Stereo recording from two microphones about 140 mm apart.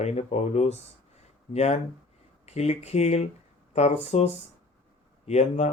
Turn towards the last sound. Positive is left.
turn(degrees=50)  # may be behind; listen again after turning